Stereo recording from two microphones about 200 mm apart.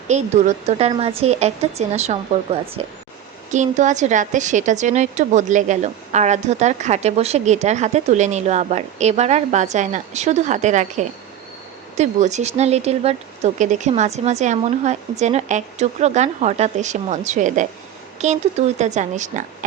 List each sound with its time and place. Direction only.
0.1 s a woman's voice: 35° right (ahead or behind)